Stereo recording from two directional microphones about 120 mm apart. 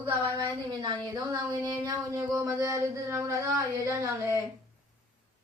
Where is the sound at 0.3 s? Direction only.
35° right (ahead or behind).